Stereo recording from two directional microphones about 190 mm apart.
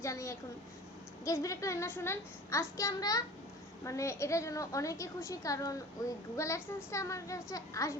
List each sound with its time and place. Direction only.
0.0 s a woman's voice: 15° left (ahead or behind)